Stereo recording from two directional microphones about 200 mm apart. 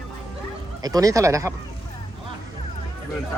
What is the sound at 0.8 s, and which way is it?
Speech, 20° right (ahead or behind).